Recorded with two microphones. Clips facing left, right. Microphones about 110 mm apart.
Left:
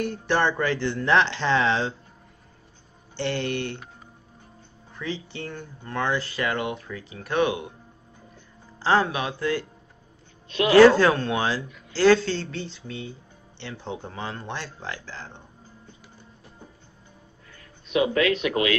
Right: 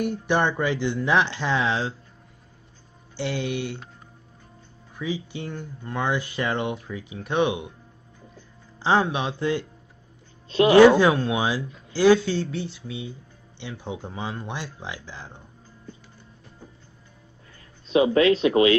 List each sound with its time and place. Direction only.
0.0 s speech: 15° right (ahead or behind)
3.2 s speech: 5° right (ahead or behind)
4.9 s speech: 10° right (ahead or behind)
8.8 s speech: 15° right (ahead or behind)
10.8 s speech: 15° right (ahead or behind)
17.8 s speech: 30° right (ahead or behind)